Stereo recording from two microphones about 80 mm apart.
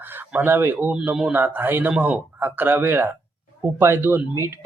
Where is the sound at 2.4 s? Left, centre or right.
Right.